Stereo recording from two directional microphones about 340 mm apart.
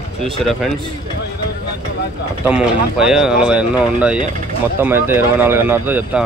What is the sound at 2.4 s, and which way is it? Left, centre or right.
Speech, centre.